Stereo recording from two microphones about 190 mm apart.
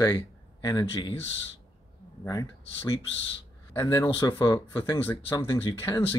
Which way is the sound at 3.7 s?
15° left (ahead or behind).